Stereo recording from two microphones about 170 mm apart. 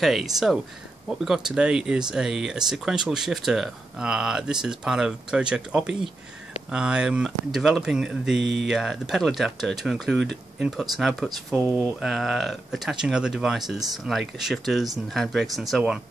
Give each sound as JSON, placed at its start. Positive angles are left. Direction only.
{"t": 0.0, "sound": "speech", "side_deg": 0}
{"t": 8.4, "sound": "speech", "side_deg": -90}
{"t": 8.6, "sound": "speech", "side_deg": 0}